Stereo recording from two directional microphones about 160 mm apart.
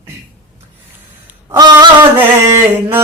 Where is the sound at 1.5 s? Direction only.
25° right (ahead or behind).